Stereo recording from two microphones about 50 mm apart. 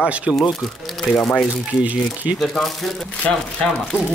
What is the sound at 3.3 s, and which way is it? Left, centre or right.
Speech, centre.